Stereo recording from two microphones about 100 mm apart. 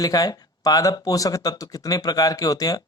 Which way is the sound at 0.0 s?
40° left (ahead or behind).